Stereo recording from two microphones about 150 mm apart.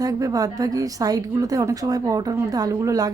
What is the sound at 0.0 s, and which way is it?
A woman's voice, 25° right (ahead or behind).